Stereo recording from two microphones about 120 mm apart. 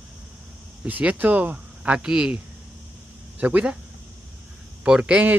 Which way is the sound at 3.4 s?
10° right (ahead or behind).